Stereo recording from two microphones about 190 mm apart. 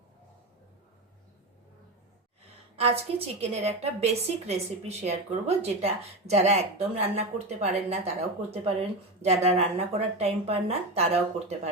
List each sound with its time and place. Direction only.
2.7 s a woman's voice: 30° right (ahead or behind)